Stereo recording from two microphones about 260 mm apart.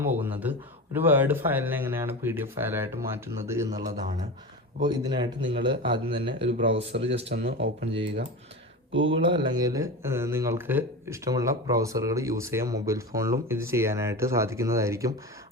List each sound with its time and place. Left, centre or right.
0.0 s speech: centre
4.9 s speech: centre
6.6 s speech: right
9.2 s speech: centre